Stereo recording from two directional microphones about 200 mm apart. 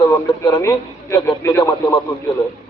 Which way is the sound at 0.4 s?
20° left (ahead or behind).